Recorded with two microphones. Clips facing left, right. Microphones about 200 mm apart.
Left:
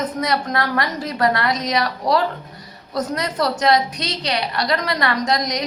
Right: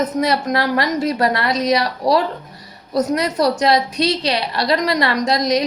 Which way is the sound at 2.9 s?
25° right (ahead or behind).